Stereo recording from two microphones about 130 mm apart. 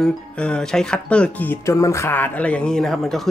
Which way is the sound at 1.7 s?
25° left (ahead or behind).